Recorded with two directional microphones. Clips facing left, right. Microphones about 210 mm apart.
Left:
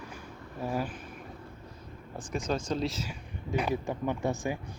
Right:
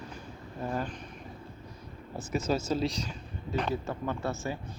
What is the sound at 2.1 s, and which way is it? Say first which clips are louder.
Speech: right 2 dB; 5° right (ahead or behind).